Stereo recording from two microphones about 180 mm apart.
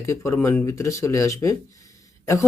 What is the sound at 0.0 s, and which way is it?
Speech, 15° left (ahead or behind).